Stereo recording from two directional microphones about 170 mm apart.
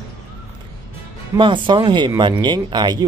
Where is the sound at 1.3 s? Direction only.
30° right (ahead or behind).